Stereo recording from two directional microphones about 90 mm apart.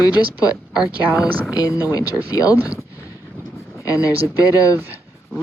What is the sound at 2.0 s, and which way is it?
Speech, 20° right (ahead or behind).